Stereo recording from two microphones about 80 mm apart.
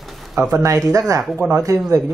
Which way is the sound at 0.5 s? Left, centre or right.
Right.